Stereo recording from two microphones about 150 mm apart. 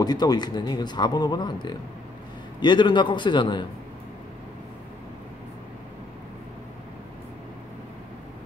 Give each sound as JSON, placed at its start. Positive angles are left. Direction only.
{"t": 0.0, "sound": "a man's voice", "side_deg": 25}